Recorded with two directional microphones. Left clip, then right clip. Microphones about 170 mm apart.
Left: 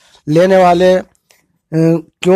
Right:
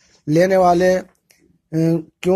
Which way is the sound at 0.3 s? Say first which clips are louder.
Left 5 dB; 30° left (ahead or behind).